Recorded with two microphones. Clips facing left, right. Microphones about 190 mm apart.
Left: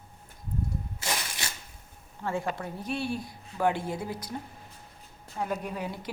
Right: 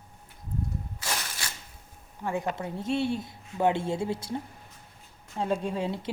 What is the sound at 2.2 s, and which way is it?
A woman's voice, 20° right (ahead or behind).